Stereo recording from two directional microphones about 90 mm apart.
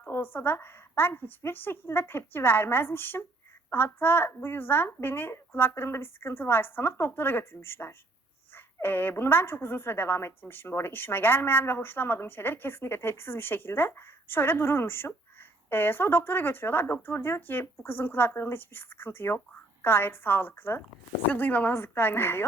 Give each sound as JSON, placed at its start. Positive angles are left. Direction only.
{"t": 0.0, "sound": "a woman's voice", "side_deg": 25}